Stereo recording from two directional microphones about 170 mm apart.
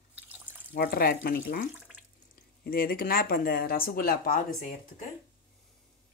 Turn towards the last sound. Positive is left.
turn(degrees=55)  # may be behind; listen again after turning